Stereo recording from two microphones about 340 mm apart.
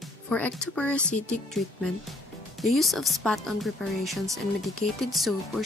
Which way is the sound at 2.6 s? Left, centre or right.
Centre.